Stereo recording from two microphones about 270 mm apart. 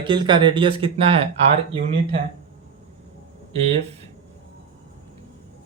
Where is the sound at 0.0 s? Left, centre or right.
Centre.